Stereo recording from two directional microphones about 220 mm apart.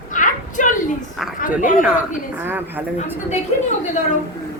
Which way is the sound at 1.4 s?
35° left (ahead or behind).